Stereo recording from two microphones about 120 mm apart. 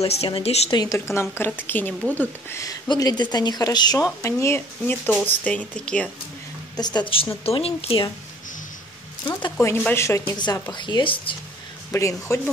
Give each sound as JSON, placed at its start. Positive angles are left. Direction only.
{"t": 0.0, "sound": "speech", "side_deg": 60}
{"t": 0.7, "sound": "a woman's voice", "side_deg": 35}
{"t": 0.9, "sound": "speech", "side_deg": 20}
{"t": 2.1, "sound": "speech", "side_deg": 25}
{"t": 6.8, "sound": "a woman's voice", "side_deg": 35}
{"t": 9.6, "sound": "speech", "side_deg": 20}
{"t": 10.3, "sound": "a woman's voice", "side_deg": 35}
{"t": 11.9, "sound": "speech", "side_deg": 25}